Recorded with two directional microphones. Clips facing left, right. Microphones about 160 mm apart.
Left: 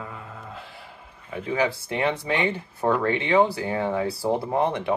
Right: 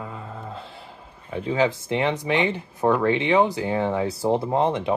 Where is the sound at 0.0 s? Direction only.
25° right (ahead or behind).